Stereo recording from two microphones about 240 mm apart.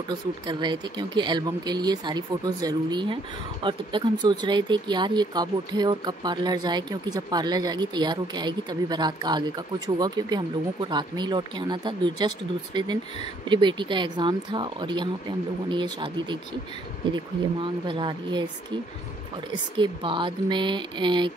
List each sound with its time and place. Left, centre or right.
0.1 s speech: centre
19.5 s speech: centre